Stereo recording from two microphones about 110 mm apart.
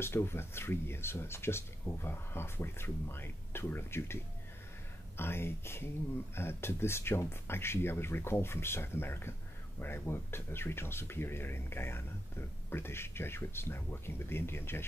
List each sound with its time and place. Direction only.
0.0 s speech: 20° left (ahead or behind)